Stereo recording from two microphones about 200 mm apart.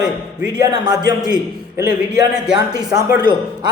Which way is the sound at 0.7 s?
20° right (ahead or behind).